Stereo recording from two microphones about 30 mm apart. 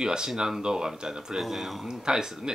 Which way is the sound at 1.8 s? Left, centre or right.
Right.